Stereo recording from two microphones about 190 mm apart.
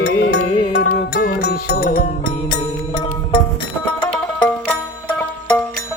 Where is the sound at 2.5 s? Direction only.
35° left (ahead or behind).